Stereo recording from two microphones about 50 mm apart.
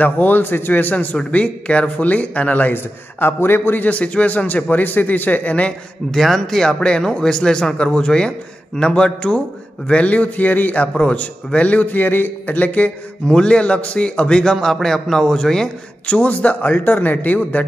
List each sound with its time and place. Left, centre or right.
0.0 s speech: left
1.1 s speech: left
3.8 s speech: left
6.1 s speech: centre; by 10.9 s left
11.0 s speech: left
13.3 s speech: centre
16.1 s speech: left